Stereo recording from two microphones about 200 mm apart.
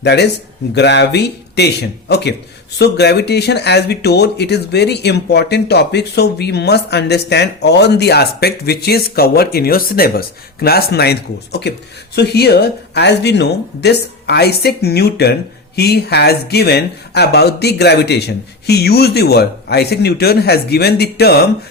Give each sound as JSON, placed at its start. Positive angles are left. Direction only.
{"t": 0.0, "sound": "speech", "side_deg": 55}